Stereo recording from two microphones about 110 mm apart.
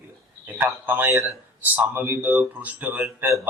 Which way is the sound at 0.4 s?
15° right (ahead or behind).